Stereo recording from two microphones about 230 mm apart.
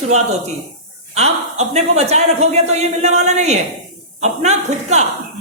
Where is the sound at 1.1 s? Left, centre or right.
Right.